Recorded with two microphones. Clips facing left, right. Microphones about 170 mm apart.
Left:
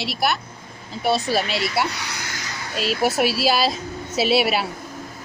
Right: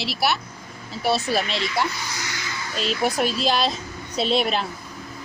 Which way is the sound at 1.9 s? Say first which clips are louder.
Even; 70° left (ahead or behind).